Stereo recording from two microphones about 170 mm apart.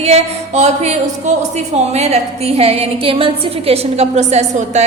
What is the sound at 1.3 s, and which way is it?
A woman's voice, 45° right (ahead or behind).